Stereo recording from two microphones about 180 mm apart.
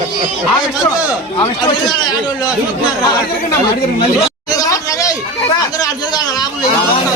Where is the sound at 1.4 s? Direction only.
25° left (ahead or behind).